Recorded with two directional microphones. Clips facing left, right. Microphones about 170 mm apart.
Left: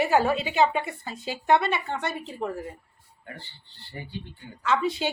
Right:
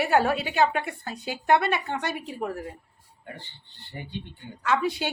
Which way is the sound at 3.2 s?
20° right (ahead or behind).